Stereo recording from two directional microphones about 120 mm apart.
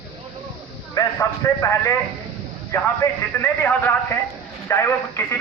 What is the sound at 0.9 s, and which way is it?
A man's voice, 30° left (ahead or behind).